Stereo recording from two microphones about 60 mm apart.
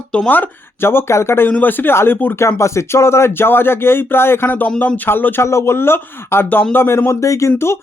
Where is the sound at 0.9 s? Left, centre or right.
Left.